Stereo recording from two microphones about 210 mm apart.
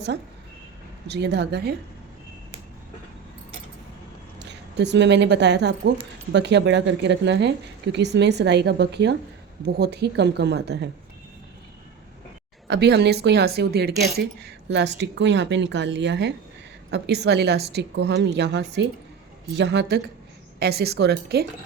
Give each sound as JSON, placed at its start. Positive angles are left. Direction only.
{"t": 1.0, "sound": "a woman's voice", "side_deg": -55}
{"t": 4.4, "sound": "a woman's voice", "side_deg": -55}
{"t": 12.6, "sound": "a woman's voice", "side_deg": -50}